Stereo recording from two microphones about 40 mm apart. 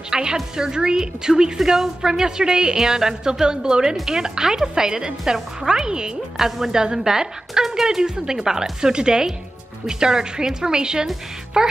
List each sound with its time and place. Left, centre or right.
0.1 s a woman's voice: centre
6.3 s a woman's voice: centre